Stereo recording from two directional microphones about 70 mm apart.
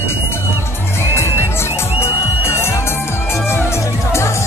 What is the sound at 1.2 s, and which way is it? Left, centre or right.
Music, left.